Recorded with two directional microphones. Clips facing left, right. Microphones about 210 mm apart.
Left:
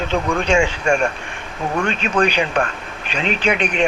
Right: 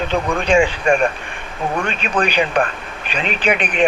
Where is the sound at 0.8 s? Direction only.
20° right (ahead or behind).